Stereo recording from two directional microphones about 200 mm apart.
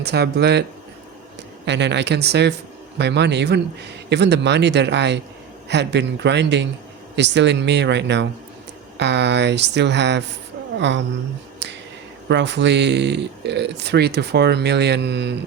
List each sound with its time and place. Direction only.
0.0 s speech: 55° right (ahead or behind)
1.6 s a woman's voice: 60° right (ahead or behind)
11.6 s finger snapping: 60° right (ahead or behind)
12.3 s speech: 60° right (ahead or behind)